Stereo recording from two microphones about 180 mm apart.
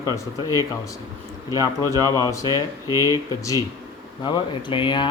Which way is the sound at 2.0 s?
20° left (ahead or behind).